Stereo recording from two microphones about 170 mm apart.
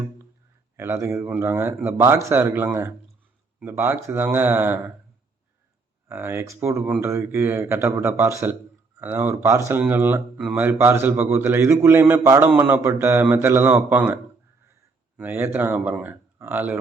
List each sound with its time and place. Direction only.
0.8 s speech: 15° right (ahead or behind)
6.1 s speech: 15° right (ahead or behind)
15.2 s speech: 10° right (ahead or behind)